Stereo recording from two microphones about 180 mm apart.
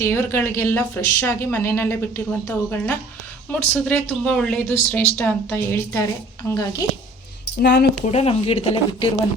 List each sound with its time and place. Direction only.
0.0 s speech: 15° left (ahead or behind)
7.6 s speech: 70° left (ahead or behind)
8.0 s speech: 35° left (ahead or behind)